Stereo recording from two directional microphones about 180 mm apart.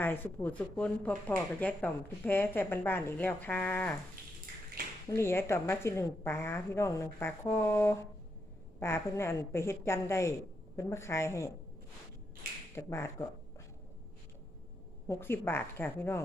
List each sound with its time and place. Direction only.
0.0 s speech: 10° left (ahead or behind)
5.0 s speech: 15° left (ahead or behind)
12.7 s speech: 15° left (ahead or behind)
15.0 s speech: 15° left (ahead or behind)